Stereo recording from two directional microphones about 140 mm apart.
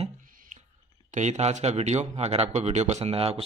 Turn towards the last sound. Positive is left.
turn(degrees=-45)  # may be behind; listen again after turning